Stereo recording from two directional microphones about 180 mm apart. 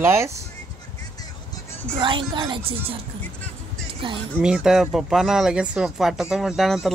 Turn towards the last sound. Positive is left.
turn(degrees=0)  # may be behind; listen again after turning